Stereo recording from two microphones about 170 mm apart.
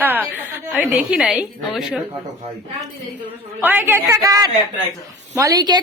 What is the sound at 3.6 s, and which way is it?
A woman's voice, 10° right (ahead or behind).